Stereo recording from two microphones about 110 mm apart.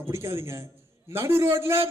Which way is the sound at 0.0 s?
25° right (ahead or behind).